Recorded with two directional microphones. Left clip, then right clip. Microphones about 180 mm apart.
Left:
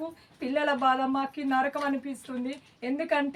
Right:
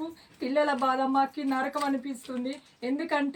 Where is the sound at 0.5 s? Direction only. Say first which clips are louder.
Left 1 dB; 20° left (ahead or behind).